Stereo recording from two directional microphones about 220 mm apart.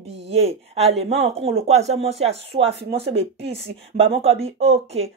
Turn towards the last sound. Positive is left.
turn(degrees=-30)  # may be behind; listen again after turning